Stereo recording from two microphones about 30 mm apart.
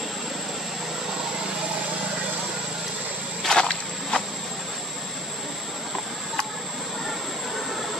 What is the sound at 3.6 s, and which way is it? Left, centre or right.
Walk, left.